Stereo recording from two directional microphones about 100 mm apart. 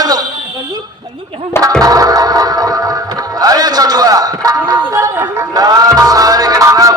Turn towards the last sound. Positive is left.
turn(degrees=-35)  # may be behind; listen again after turning